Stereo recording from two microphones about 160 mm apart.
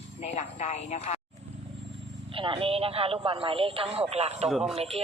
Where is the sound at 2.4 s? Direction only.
35° right (ahead or behind).